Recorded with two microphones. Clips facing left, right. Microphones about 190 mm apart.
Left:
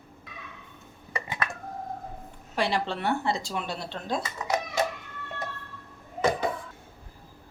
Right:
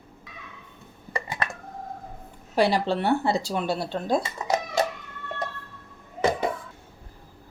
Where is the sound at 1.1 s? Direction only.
35° right (ahead or behind).